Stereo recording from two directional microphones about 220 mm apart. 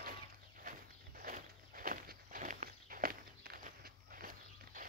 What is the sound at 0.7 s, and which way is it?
Walk, 40° right (ahead or behind).